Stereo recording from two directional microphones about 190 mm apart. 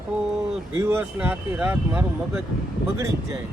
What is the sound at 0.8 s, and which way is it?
Speech, 10° right (ahead or behind).